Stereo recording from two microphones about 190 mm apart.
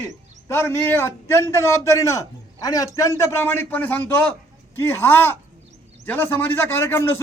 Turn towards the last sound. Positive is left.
turn(degrees=15)  # may be behind; listen again after turning